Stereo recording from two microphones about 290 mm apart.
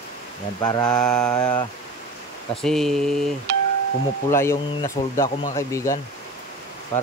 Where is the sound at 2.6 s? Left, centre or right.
Centre.